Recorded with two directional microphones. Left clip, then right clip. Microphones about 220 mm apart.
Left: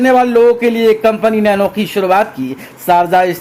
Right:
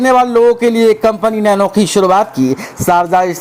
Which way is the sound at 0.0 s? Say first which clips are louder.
Even; 25° right (ahead or behind).